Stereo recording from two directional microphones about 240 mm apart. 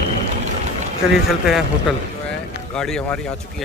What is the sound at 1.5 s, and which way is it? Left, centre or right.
Speech, centre.